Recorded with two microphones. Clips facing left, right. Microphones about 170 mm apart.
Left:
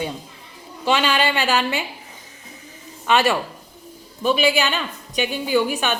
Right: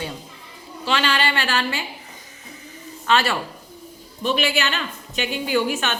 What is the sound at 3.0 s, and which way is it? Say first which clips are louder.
A woman's voice: left 2 dB; 15° left (ahead or behind).